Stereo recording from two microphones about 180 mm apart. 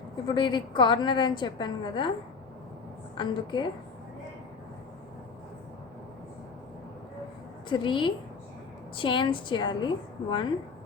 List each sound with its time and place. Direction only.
0.3 s a woman's voice: 25° left (ahead or behind)
3.2 s a woman's voice: 25° left (ahead or behind)
7.7 s a woman's voice: 25° left (ahead or behind)